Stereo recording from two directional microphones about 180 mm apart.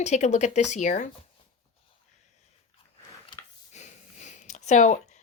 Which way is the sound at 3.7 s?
40° left (ahead or behind).